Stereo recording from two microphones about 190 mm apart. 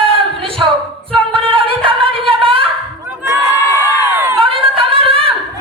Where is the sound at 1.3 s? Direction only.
30° right (ahead or behind).